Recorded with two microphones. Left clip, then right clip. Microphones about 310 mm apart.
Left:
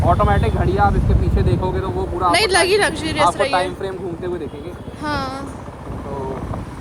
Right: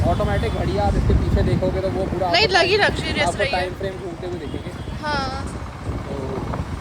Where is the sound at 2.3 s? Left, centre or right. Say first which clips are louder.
Even; left.